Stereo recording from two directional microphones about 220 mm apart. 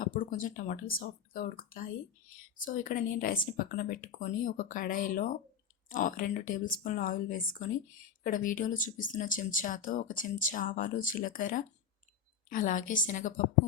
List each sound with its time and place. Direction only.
0.0 s speech: 35° left (ahead or behind)